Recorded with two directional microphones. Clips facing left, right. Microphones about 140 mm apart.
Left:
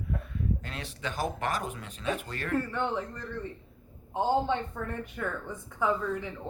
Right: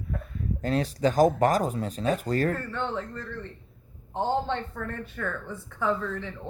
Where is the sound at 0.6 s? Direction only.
40° right (ahead or behind).